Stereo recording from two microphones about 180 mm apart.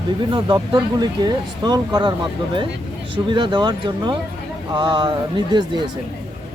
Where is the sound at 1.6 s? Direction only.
25° right (ahead or behind).